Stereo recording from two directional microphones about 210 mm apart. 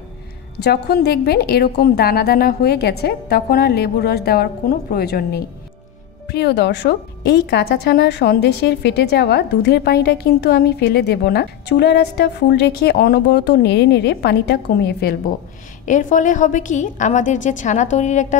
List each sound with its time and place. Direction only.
0.6 s a woman's voice: 50° left (ahead or behind)
15.8 s a woman's voice: 40° left (ahead or behind)